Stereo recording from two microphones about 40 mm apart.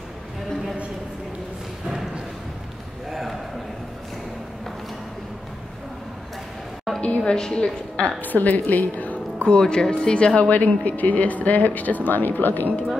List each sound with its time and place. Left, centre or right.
3.1 s a sound: centre
7.0 s music: left
7.3 s speech: centre
8.2 s a woman's voice: left
9.5 s speech: centre
10.5 s speech: left